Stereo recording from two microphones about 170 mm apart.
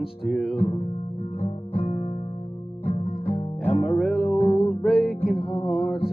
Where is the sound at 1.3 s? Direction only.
35° left (ahead or behind).